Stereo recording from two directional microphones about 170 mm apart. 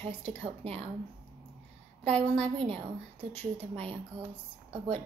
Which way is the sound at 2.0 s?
35° right (ahead or behind).